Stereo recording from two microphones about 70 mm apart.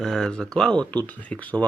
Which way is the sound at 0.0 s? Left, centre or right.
Centre.